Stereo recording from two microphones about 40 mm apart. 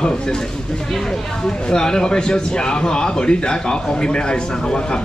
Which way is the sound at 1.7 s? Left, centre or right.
Centre.